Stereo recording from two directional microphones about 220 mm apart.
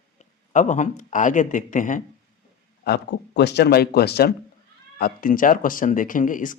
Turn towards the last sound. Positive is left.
turn(degrees=35)  # may be behind; listen again after turning